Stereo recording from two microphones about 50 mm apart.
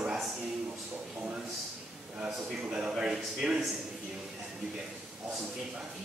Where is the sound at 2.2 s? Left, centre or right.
Centre.